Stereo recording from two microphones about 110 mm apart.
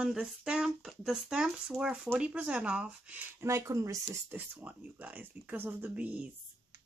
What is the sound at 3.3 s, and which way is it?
Speech, 25° right (ahead or behind).